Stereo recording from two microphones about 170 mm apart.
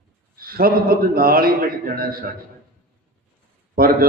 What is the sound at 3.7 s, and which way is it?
Speech, 60° right (ahead or behind).